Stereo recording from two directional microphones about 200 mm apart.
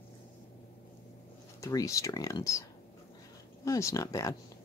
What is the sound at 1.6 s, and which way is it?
Speech, 15° left (ahead or behind).